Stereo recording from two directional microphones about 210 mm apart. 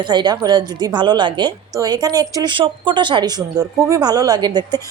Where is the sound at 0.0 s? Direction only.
20° right (ahead or behind).